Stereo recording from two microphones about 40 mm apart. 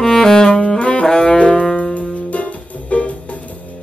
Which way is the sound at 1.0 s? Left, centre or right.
Centre.